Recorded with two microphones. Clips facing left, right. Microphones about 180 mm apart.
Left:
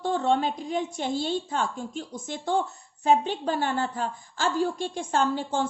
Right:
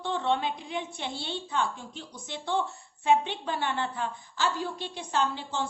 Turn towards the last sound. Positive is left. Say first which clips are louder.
# left 4 dB
turn(degrees=45)  # may be behind; listen again after turning